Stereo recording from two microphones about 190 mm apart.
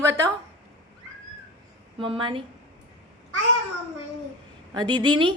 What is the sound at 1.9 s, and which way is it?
Speech, 30° right (ahead or behind).